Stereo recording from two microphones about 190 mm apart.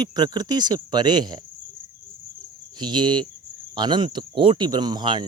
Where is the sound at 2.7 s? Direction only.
25° right (ahead or behind).